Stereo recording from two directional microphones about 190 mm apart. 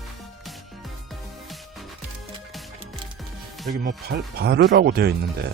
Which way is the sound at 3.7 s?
50° right (ahead or behind).